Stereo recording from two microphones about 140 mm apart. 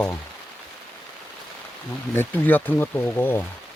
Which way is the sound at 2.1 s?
15° left (ahead or behind).